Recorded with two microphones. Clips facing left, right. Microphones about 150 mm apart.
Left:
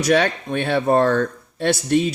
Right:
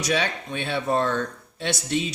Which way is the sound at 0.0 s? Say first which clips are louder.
Left 7 dB; 55° left (ahead or behind).